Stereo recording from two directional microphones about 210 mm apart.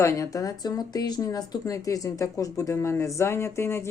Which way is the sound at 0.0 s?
15° left (ahead or behind).